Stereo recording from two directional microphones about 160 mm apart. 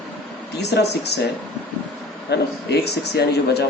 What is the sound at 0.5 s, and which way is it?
Speech, 90° left.